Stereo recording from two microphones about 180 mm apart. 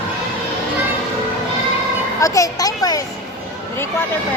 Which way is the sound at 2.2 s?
20° left (ahead or behind).